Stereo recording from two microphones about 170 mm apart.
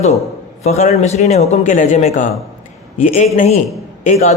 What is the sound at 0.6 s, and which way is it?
A man's voice, 40° left (ahead or behind).